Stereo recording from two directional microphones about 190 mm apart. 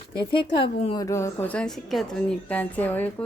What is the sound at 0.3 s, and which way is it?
Speech, 25° left (ahead or behind).